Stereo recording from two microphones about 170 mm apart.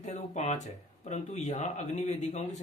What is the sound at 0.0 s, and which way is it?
Speech, 40° left (ahead or behind).